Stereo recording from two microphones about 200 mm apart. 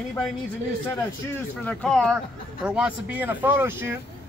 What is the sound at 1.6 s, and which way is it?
Speech, 5° left (ahead or behind).